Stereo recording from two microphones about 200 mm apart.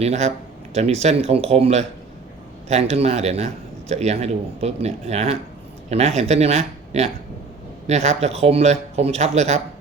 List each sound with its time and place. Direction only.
0.0 s a man's voice: 35° right (ahead or behind)